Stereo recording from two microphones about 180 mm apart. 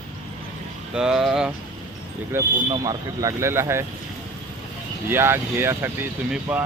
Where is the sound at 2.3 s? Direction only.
15° right (ahead or behind).